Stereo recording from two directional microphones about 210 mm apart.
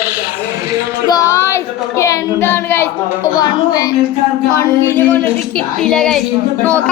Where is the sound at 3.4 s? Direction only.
15° left (ahead or behind).